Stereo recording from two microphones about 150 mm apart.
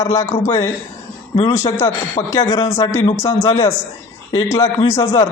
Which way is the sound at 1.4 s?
20° left (ahead or behind).